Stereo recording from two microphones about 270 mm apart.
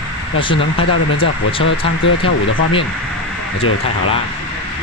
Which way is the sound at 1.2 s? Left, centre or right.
Centre.